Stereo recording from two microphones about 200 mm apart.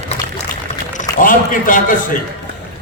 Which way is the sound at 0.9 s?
40° left (ahead or behind).